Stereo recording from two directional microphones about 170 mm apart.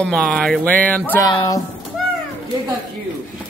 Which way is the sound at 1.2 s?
20° left (ahead or behind).